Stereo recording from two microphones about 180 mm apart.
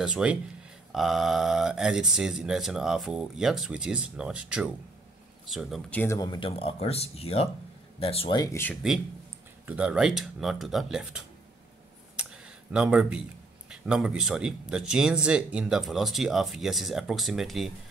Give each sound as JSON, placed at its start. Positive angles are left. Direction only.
{"t": 0.0, "sound": "a man's voice", "side_deg": -5}
{"t": 6.1, "sound": "speech", "side_deg": 20}
{"t": 6.5, "sound": "speech", "side_deg": 35}
{"t": 9.7, "sound": "a man's voice", "side_deg": -5}
{"t": 12.2, "sound": "a sound", "side_deg": -5}
{"t": 12.7, "sound": "a man's voice", "side_deg": -5}